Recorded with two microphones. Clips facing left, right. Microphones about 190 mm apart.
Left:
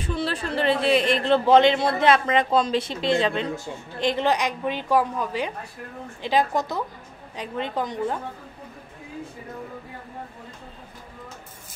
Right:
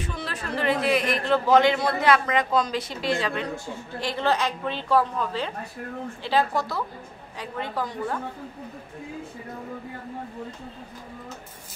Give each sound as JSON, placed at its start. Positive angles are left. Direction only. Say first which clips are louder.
{"t": 0.0, "sound": "a woman's voice", "louder": "left 6 dB", "side_deg": 30}